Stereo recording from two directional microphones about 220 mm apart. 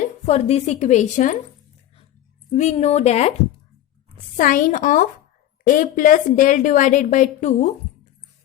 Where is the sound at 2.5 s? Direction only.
30° left (ahead or behind).